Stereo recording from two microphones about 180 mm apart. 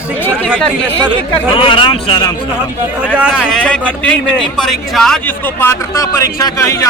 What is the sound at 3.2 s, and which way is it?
A man's voice, centre (ahead or behind).